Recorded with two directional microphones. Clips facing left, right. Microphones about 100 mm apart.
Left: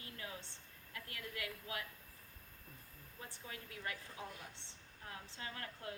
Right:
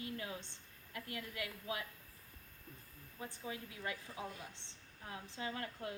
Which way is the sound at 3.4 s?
20° right (ahead or behind).